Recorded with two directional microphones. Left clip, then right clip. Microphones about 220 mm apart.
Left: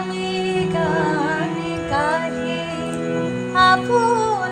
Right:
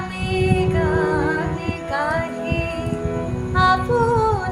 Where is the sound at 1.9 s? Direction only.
10° right (ahead or behind).